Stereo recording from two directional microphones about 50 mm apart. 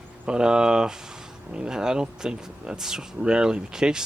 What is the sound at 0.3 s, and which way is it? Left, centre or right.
Speech, centre.